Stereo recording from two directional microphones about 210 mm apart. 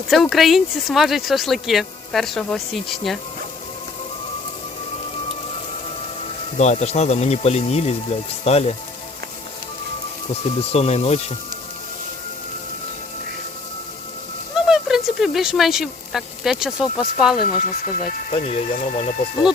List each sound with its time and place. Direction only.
0.1 s speech: centre (ahead or behind)
6.6 s speech: 30° left (ahead or behind)
10.4 s speech: 30° left (ahead or behind)
14.5 s speech: centre (ahead or behind)
17.8 s speech: 30° left (ahead or behind)